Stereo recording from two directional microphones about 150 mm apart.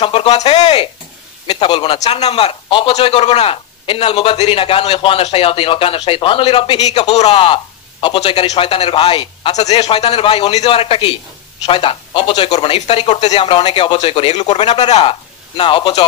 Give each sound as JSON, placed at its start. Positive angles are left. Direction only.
{"t": 0.0, "sound": "a man's voice", "side_deg": 35}
{"t": 1.5, "sound": "a man's voice", "side_deg": 30}
{"t": 2.0, "sound": "a man's voice", "side_deg": 45}
{"t": 7.3, "sound": "a man's voice", "side_deg": 35}
{"t": 13.3, "sound": "a man's voice", "side_deg": 35}